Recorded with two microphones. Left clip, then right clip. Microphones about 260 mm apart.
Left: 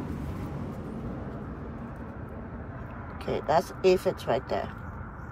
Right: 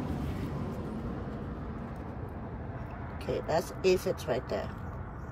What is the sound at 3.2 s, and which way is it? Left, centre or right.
Speech, centre.